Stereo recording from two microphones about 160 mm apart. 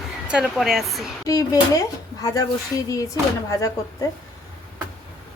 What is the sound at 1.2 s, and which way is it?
Speech, 20° left (ahead or behind).